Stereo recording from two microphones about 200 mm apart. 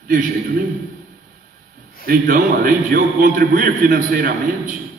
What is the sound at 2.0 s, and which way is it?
A man's voice, 45° right (ahead or behind).